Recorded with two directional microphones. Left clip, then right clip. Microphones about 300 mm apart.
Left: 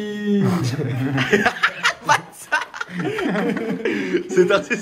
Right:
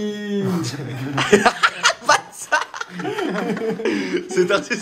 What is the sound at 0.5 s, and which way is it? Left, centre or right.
Speech, left.